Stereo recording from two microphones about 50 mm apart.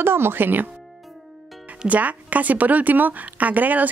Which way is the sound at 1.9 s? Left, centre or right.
Right.